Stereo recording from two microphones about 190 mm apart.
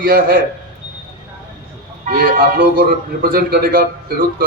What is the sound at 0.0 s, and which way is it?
Speech, 50° right (ahead or behind).